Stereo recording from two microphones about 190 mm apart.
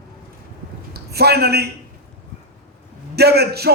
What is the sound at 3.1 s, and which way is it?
Speech, 55° right (ahead or behind).